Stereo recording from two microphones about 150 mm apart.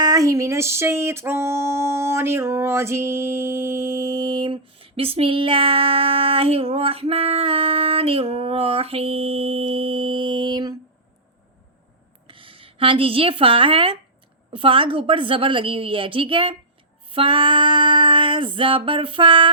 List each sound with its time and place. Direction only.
0.0 s music: 25° right (ahead or behind)
12.3 s speech: 35° right (ahead or behind)
14.5 s music: 35° right (ahead or behind)